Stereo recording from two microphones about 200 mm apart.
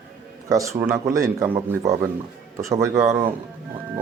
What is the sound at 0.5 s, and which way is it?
Speech, 15° right (ahead or behind).